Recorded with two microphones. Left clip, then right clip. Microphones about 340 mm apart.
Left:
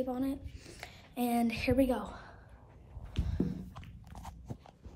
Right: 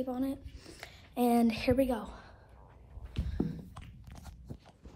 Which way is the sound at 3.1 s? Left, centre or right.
Centre.